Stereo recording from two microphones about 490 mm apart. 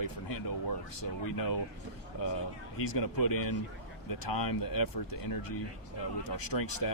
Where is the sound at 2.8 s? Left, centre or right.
Left.